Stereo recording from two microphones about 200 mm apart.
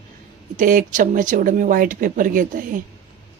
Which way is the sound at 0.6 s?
40° right (ahead or behind).